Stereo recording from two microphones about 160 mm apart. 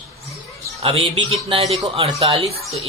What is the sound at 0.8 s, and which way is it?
A man's voice, 40° right (ahead or behind).